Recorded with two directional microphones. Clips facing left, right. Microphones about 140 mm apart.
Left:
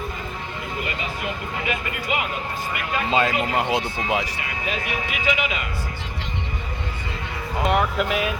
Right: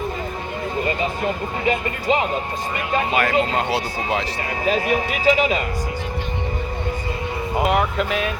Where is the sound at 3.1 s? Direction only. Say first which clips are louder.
Even; 20° left (ahead or behind).